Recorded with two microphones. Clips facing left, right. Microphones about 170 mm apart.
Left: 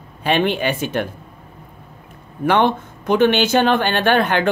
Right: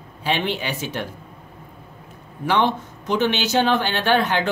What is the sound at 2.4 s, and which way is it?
Speech, 55° left (ahead or behind).